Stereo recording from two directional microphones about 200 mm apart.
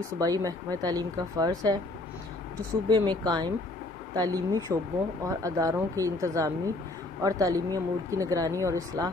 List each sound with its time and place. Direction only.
0.2 s speech: 15° right (ahead or behind)
2.9 s speech: 20° right (ahead or behind)